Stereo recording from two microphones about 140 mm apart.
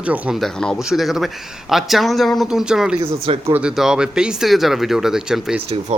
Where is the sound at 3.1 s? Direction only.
45° right (ahead or behind).